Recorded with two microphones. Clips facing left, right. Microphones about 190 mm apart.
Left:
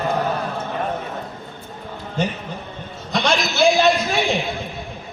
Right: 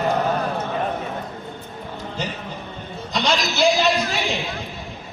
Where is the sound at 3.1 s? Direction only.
55° left (ahead or behind).